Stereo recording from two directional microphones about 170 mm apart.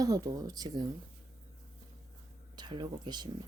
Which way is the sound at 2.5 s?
25° right (ahead or behind).